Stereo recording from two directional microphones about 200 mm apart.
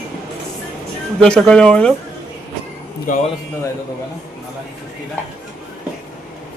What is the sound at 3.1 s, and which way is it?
Speech, 40° left (ahead or behind).